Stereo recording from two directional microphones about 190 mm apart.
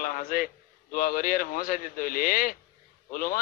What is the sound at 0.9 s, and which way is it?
A man's voice, 50° left (ahead or behind).